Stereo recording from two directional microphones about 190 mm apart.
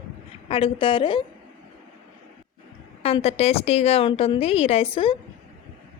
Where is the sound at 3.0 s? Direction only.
30° left (ahead or behind).